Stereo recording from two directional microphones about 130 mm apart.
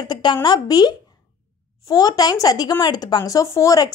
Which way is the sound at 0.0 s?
35° left (ahead or behind).